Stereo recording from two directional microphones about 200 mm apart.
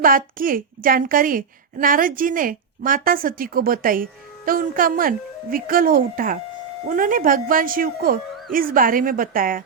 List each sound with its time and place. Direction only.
0.0 s a woman's voice: 45° right (ahead or behind)